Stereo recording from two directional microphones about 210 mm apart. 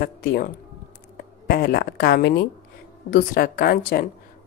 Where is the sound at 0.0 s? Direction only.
45° left (ahead or behind).